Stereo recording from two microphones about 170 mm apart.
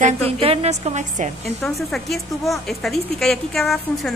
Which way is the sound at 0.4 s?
35° right (ahead or behind).